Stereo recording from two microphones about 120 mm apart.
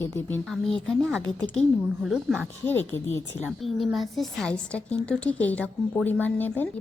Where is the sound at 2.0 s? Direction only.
5° right (ahead or behind).